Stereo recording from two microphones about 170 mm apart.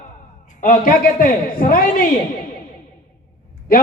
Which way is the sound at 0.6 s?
50° left (ahead or behind).